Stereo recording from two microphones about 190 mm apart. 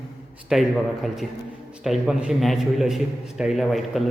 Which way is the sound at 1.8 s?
5° right (ahead or behind).